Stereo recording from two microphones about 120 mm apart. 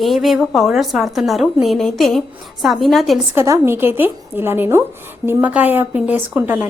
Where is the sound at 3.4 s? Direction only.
25° right (ahead or behind).